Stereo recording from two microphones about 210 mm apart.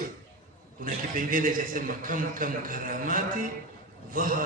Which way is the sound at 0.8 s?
40° right (ahead or behind).